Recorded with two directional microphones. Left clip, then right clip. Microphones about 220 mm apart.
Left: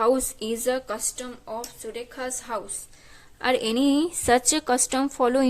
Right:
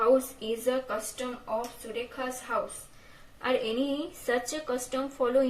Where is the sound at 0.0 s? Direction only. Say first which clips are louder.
Left 2 dB; 35° left (ahead or behind).